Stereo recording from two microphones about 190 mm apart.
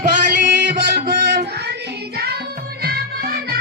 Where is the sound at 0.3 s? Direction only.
60° right (ahead or behind).